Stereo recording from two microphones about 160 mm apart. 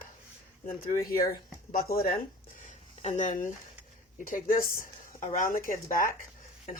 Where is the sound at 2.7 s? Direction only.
45° left (ahead or behind).